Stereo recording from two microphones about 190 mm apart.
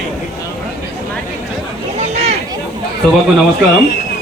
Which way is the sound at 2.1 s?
35° right (ahead or behind).